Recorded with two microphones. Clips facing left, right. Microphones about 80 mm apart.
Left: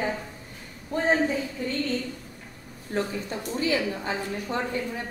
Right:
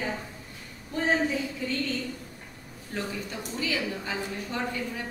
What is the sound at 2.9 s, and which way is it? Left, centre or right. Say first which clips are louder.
A woman's voice: left 5 dB; left.